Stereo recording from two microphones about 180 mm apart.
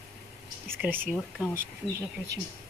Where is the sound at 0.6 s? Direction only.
10° right (ahead or behind).